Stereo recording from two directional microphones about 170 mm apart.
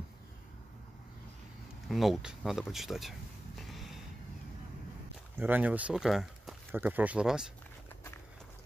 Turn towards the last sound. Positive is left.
turn(degrees=-5)  # may be behind; listen again after turning